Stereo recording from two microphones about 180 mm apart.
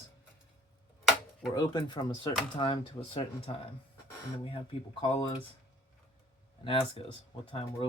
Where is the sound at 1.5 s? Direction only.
25° left (ahead or behind).